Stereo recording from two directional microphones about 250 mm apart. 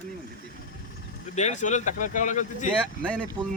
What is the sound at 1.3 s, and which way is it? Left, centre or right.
Speech, left.